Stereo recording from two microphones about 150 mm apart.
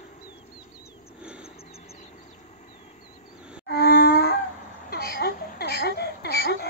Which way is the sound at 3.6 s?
90° left.